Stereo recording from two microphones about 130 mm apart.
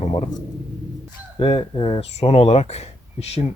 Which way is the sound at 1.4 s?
40° left (ahead or behind).